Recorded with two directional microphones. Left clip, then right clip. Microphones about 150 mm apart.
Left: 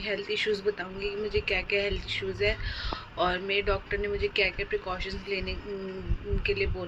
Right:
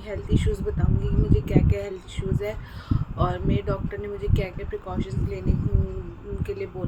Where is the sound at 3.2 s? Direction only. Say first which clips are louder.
Left 1 dB; 20° right (ahead or behind).